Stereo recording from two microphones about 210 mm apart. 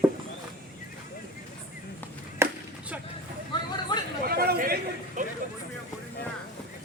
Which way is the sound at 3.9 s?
20° left (ahead or behind).